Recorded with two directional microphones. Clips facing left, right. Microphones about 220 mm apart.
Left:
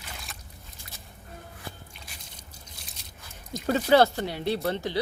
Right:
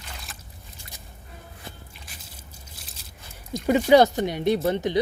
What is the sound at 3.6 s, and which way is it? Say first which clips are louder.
Speech: right 4 dB; 15° right (ahead or behind).